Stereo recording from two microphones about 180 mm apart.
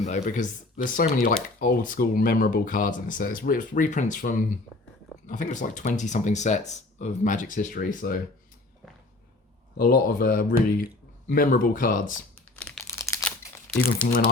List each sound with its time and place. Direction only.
0.0 s speech: 45° left (ahead or behind)
9.7 s speech: 50° left (ahead or behind)
12.5 s crumpling: 5° left (ahead or behind)